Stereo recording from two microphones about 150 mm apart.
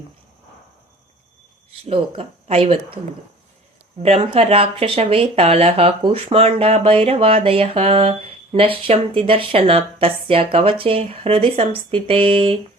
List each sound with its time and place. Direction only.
1.9 s speech: 40° right (ahead or behind)
4.0 s speech: 40° right (ahead or behind)